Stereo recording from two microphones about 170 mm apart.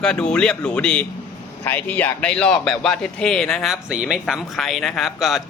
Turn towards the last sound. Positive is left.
turn(degrees=0)  # may be behind; listen again after turning